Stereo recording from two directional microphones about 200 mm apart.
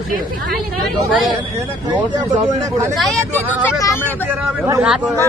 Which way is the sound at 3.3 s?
10° left (ahead or behind).